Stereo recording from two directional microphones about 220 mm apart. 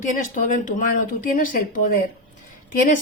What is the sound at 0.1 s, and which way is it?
A woman's voice, 35° left (ahead or behind).